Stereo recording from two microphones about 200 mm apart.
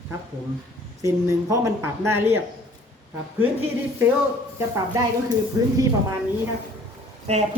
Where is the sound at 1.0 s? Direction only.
15° right (ahead or behind).